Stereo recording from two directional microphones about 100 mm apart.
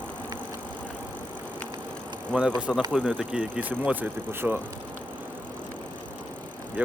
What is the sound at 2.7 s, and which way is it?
Speech, centre (ahead or behind).